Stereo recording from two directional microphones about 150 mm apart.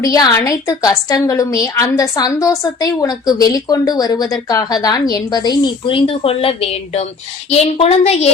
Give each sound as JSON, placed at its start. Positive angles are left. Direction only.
{"t": 0.0, "sound": "a woman's voice", "side_deg": 25}